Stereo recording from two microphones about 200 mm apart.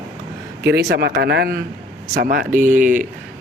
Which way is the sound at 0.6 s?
50° right (ahead or behind).